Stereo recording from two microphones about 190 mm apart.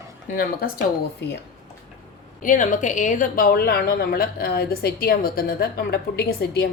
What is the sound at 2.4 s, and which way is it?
A woman's voice, 45° left (ahead or behind).